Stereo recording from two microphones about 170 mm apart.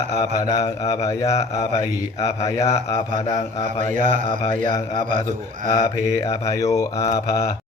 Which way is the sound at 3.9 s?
50° right (ahead or behind).